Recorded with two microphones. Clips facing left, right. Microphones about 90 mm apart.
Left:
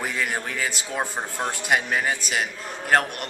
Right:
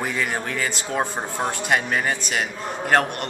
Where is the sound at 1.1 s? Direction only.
15° right (ahead or behind).